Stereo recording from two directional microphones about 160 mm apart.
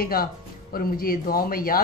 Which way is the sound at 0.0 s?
70° left (ahead or behind).